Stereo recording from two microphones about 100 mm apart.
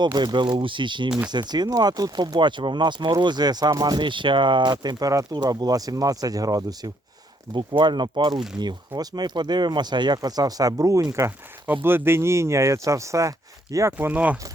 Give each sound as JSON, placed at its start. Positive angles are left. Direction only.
{"t": 0.0, "sound": "speech", "side_deg": -45}
{"t": 7.5, "sound": "speech", "side_deg": -50}
{"t": 11.6, "sound": "speech", "side_deg": -20}
{"t": 14.1, "sound": "speech", "side_deg": -15}